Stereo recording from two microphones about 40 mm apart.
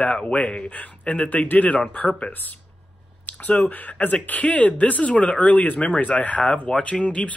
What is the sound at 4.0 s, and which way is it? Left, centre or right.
Speech, left.